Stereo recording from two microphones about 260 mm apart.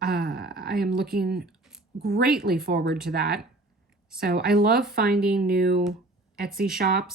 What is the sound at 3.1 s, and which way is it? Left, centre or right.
Speech, right.